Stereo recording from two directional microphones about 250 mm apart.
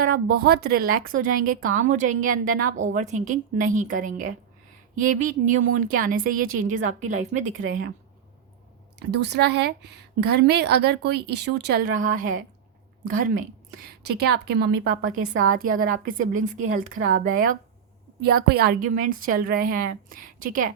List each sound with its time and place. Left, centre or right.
0.3 s a woman's voice: right
9.0 s a woman's voice: right